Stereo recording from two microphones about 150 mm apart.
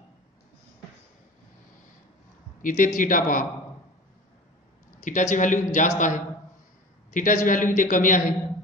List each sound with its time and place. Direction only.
2.6 s a man's voice: 60° left (ahead or behind)
5.0 s a man's voice: 55° left (ahead or behind)